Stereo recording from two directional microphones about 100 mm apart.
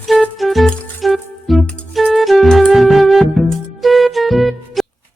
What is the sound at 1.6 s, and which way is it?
Music, 10° left (ahead or behind).